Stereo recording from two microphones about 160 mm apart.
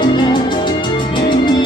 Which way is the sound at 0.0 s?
30° left (ahead or behind).